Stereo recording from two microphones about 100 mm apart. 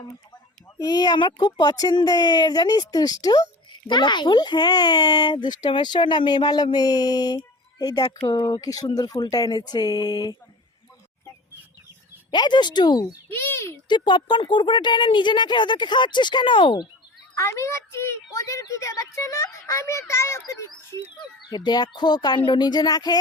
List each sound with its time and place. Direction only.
0.8 s a child's voice: 40° left (ahead or behind)
12.3 s speech: 45° left (ahead or behind)
13.3 s a child's voice: 25° left (ahead or behind)
13.8 s speech: 50° left (ahead or behind)
17.3 s a child's voice: 30° left (ahead or behind)
21.2 s speech: 45° left (ahead or behind)